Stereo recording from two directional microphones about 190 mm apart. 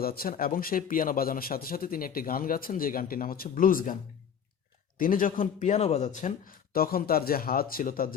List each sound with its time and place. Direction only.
0.0 s speech: 50° left (ahead or behind)
4.9 s speech: 45° left (ahead or behind)